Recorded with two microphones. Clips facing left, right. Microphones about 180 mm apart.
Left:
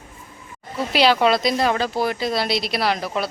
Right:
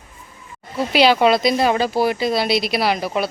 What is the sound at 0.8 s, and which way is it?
A woman's voice, centre (ahead or behind).